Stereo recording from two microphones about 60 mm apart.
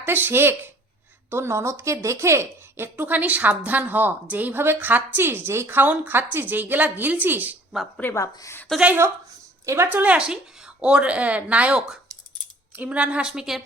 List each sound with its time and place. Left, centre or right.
0.0 s a woman's voice: right
2.9 s a woman's voice: right
8.1 s a woman's voice: left
9.6 s a woman's voice: right
9.9 s a woman's voice: right; by 13.6 s centre